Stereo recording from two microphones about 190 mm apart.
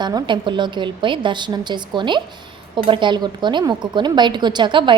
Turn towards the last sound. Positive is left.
turn(degrees=-25)  # may be behind; listen again after turning